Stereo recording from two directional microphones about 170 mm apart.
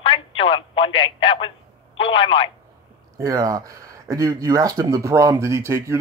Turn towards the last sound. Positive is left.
turn(degrees=-15)  # may be behind; listen again after turning